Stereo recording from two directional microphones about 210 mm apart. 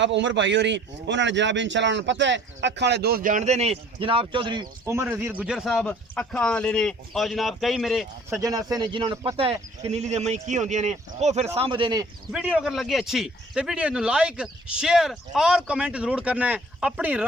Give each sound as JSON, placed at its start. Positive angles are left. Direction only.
{"t": 0.0, "sound": "a man's voice", "side_deg": -60}
{"t": 8.3, "sound": "a man's voice", "side_deg": -15}
{"t": 12.3, "sound": "a man's voice", "side_deg": -5}